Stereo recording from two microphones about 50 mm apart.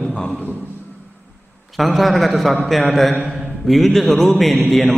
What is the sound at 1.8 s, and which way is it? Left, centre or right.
A man's voice, centre.